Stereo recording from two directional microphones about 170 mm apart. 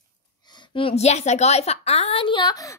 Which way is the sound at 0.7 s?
35° left (ahead or behind).